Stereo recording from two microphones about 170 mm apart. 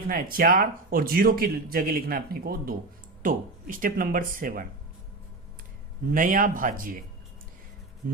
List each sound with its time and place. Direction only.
0.1 s speech: 60° right (ahead or behind)
6.1 s speech: 55° right (ahead or behind)
8.0 s speech: 55° right (ahead or behind)